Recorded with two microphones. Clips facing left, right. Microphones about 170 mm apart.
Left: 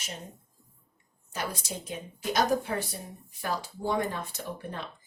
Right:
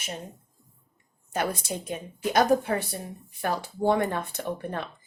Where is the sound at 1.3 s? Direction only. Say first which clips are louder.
Right 6 dB; 55° right (ahead or behind).